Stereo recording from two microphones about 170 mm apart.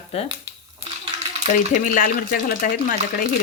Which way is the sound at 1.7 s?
50° left (ahead or behind).